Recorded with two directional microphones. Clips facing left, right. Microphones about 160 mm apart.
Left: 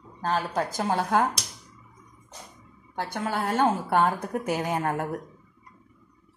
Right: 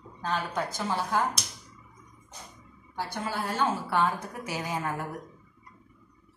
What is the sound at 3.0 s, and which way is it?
Speech, 65° left (ahead or behind).